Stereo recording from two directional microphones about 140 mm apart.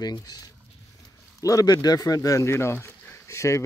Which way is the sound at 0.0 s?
30° left (ahead or behind).